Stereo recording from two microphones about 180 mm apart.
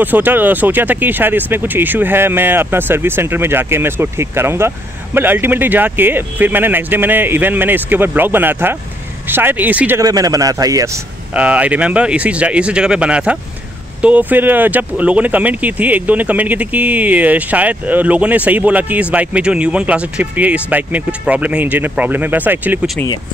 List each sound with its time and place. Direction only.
0.0 s speech: 10° right (ahead or behind)
11.3 s speech: 5° right (ahead or behind)